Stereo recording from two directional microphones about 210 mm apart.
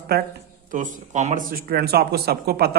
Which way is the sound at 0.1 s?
45° right (ahead or behind).